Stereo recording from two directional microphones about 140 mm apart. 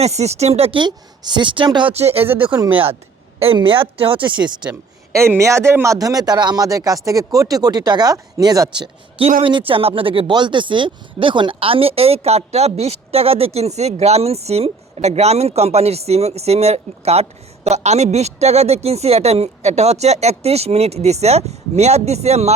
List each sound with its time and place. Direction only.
0.0 s speech: 50° right (ahead or behind); by 1.9 s 35° right (ahead or behind)
1.9 s speech: 50° right (ahead or behind)
3.4 s speech: 40° right (ahead or behind)
4.6 s speech: 15° right (ahead or behind); by 22.5 s 50° right (ahead or behind)